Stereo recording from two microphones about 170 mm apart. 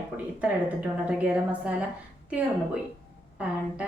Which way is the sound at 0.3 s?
10° right (ahead or behind).